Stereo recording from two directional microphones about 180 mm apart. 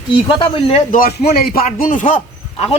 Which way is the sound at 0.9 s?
55° left (ahead or behind).